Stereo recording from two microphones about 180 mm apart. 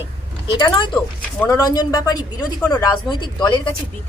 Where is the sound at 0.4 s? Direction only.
25° left (ahead or behind).